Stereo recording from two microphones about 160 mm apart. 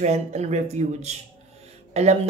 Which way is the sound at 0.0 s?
40° right (ahead or behind).